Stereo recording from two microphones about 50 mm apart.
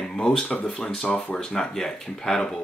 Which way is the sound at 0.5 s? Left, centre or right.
Left.